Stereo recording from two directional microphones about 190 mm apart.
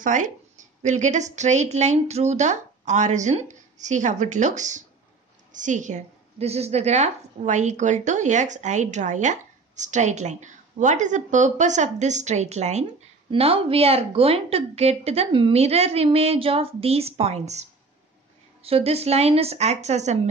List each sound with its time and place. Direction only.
0.0 s a woman's voice: 40° right (ahead or behind)